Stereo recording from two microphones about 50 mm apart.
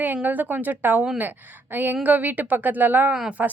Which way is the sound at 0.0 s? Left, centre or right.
Right.